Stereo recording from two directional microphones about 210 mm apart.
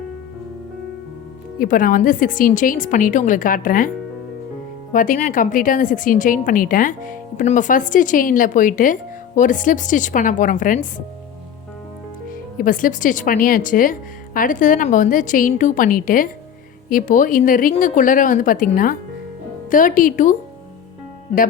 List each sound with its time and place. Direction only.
1.5 s a woman's voice: 40° left (ahead or behind)
12.5 s a woman's voice: 40° left (ahead or behind)